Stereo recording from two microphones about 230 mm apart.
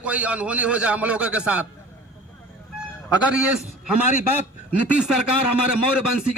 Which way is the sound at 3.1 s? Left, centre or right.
Centre.